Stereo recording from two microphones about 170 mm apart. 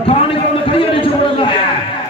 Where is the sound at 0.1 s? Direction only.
30° left (ahead or behind).